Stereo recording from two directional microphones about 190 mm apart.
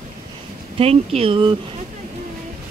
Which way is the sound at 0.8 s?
30° right (ahead or behind).